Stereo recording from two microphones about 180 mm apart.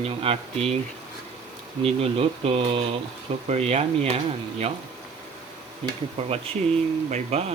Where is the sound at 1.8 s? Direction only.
35° right (ahead or behind).